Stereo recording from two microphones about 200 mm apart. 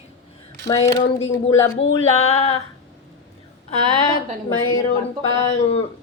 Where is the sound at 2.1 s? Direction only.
30° left (ahead or behind).